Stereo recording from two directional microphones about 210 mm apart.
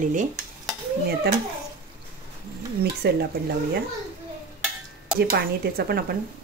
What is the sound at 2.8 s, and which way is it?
Speech, 50° right (ahead or behind).